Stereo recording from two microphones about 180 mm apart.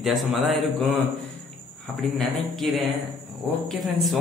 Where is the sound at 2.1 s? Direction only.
Centre (ahead or behind).